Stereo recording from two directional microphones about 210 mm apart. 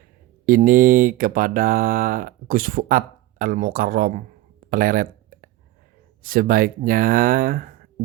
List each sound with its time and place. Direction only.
0.4 s speech: 40° right (ahead or behind)
4.7 s a sound: 40° right (ahead or behind)
6.2 s speech: 45° right (ahead or behind)